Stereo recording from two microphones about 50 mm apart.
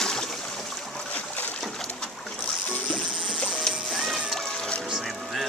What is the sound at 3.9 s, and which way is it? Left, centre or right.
Music, centre.